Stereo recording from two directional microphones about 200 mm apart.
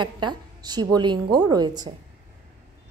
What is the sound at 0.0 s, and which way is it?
A woman's voice, 20° right (ahead or behind).